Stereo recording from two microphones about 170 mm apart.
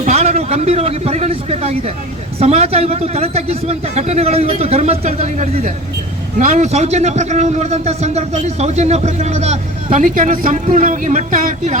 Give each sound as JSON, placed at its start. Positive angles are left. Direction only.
{"t": 0.0, "sound": "a man's voice", "side_deg": -40}